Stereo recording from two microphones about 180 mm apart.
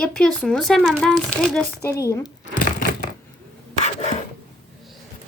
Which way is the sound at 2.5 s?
50° left (ahead or behind).